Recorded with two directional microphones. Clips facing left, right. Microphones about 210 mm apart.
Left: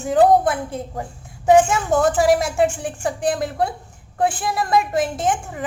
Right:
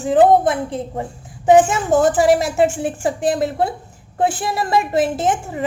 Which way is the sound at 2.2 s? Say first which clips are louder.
Right 2 dB; centre (ahead or behind).